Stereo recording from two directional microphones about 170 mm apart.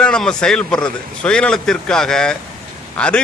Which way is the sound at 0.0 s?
5° left (ahead or behind).